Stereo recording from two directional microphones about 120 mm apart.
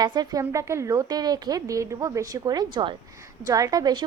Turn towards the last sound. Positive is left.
turn(degrees=-35)  # may be behind; listen again after turning